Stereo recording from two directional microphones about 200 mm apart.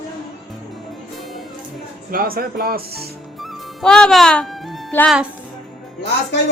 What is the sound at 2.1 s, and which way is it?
Speech, 45° right (ahead or behind).